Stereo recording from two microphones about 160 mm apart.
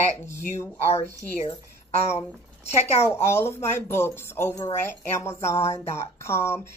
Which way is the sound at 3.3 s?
15° left (ahead or behind).